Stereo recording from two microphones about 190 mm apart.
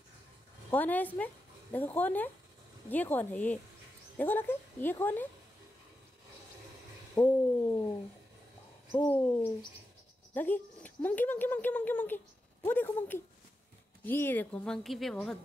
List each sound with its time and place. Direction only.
0.7 s a woman's voice: 10° left (ahead or behind)
7.2 s speech: 15° left (ahead or behind)
8.9 s speech: 10° left (ahead or behind)